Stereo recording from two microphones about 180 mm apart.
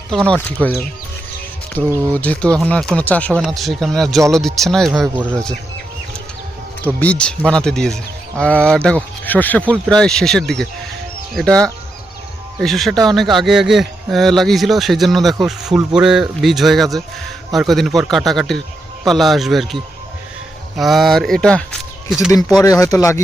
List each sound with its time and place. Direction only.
0.1 s speech: 5° left (ahead or behind)
5.0 s speech: 10° right (ahead or behind)
6.8 s speech: 10° left (ahead or behind)
22.6 s speech: 20° left (ahead or behind)